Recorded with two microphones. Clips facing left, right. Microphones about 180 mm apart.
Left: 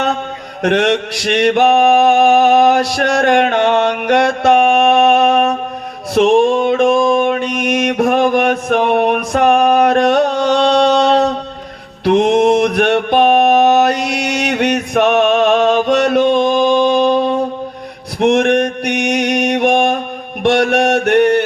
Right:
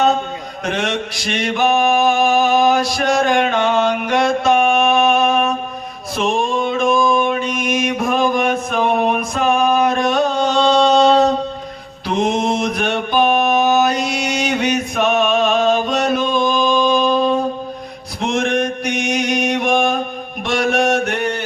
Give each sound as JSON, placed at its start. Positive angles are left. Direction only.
{"t": 0.6, "sound": "mantra", "side_deg": 70}